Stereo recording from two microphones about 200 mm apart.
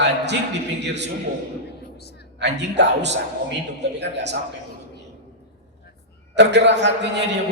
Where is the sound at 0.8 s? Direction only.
60° right (ahead or behind).